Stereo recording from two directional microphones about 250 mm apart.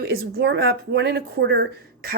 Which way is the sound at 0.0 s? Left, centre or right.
Right.